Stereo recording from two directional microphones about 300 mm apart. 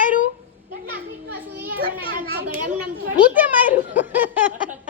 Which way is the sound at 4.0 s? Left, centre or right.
Centre.